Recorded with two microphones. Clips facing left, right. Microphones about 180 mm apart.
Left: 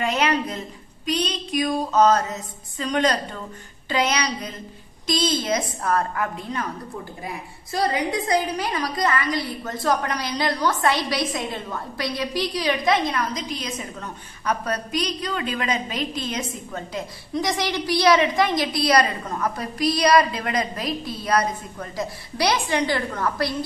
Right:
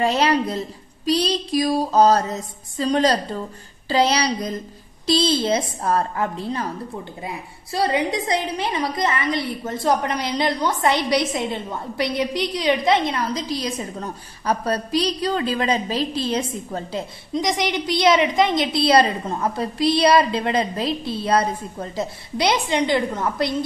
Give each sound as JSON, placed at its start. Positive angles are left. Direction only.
{"t": 0.0, "sound": "a woman's voice", "side_deg": -35}
{"t": 17.3, "sound": "a woman's voice", "side_deg": -20}